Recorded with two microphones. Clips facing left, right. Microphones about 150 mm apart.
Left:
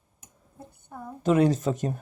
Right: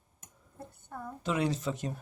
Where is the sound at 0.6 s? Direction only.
15° left (ahead or behind).